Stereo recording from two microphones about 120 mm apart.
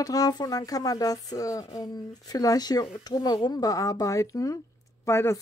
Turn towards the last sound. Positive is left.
turn(degrees=20)  # may be behind; listen again after turning